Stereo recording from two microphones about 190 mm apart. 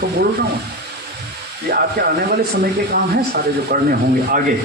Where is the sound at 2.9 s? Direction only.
55° right (ahead or behind).